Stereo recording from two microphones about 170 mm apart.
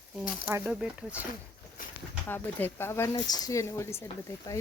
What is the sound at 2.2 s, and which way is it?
Speech, 10° left (ahead or behind).